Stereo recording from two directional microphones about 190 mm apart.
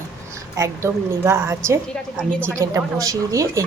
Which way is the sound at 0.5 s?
15° right (ahead or behind).